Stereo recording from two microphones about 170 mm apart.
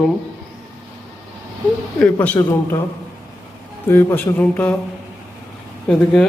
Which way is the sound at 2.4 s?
20° left (ahead or behind).